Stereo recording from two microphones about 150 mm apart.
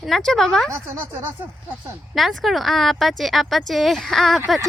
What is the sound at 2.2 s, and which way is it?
Speech, centre (ahead or behind).